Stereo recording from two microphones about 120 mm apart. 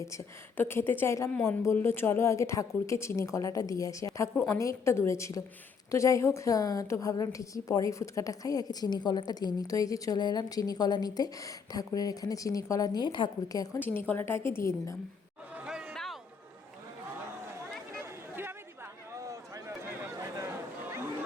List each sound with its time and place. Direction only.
0.0 s a woman's voice: 25° left (ahead or behind)
1.3 s a woman's voice: 10° left (ahead or behind)
1.6 s a woman's voice: 20° left (ahead or behind); by 13.7 s 35° left (ahead or behind)
13.7 s a woman's voice: 15° left (ahead or behind)
15.5 s a sound: 5° right (ahead or behind)
17.9 s chatter: 20° right (ahead or behind)
19.1 s a sound: 25° right (ahead or behind)